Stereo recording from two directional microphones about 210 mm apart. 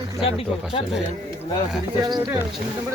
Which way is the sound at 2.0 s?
20° right (ahead or behind).